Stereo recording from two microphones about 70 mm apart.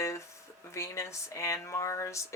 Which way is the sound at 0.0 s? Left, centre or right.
Left.